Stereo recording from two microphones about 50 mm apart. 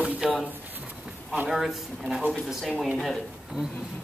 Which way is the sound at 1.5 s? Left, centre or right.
Centre.